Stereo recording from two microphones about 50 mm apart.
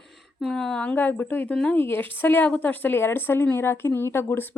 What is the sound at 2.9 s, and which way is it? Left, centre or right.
Speech, left.